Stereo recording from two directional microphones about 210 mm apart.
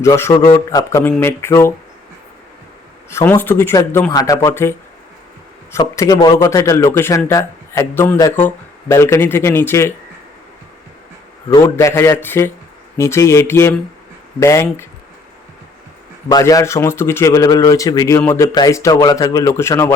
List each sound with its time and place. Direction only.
0.0 s a man's voice: 15° left (ahead or behind)
3.1 s a man's voice: 10° left (ahead or behind)
5.7 s a man's voice: 15° left (ahead or behind)
11.4 s a man's voice: 15° left (ahead or behind)
16.3 s a man's voice: 15° left (ahead or behind)